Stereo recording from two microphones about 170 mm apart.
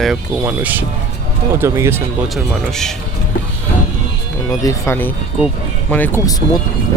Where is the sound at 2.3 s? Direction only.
5° left (ahead or behind).